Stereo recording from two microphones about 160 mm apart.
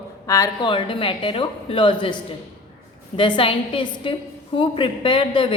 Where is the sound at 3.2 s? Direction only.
30° left (ahead or behind).